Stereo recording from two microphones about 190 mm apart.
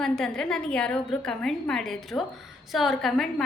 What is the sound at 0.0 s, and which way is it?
A woman's voice, 5° left (ahead or behind).